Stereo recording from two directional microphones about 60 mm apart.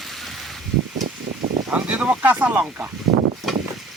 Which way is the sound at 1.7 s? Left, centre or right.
Right.